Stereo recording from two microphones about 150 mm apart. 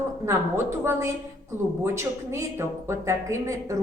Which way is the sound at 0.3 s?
20° right (ahead or behind).